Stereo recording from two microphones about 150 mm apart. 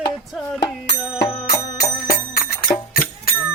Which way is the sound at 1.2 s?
85° left.